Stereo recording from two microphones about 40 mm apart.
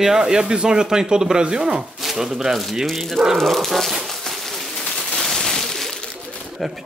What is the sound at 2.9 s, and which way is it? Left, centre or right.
Speech, centre.